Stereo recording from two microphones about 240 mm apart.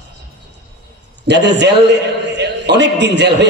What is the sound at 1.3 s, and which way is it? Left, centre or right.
A man's voice, right.